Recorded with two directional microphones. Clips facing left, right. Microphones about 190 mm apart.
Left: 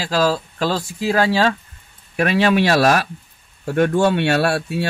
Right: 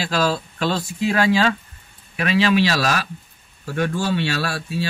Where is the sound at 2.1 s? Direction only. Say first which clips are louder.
Left 2 dB; 50° left (ahead or behind).